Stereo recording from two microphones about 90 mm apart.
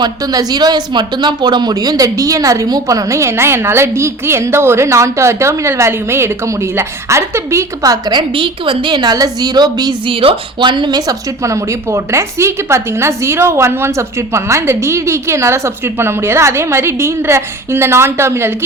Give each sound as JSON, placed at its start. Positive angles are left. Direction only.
{"t": 0.0, "sound": "speech", "side_deg": -45}
{"t": 8.1, "sound": "a woman's voice", "side_deg": -70}
{"t": 10.1, "sound": "speech", "side_deg": -80}